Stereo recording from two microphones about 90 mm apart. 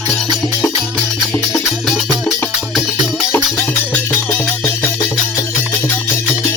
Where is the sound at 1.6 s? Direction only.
5° right (ahead or behind).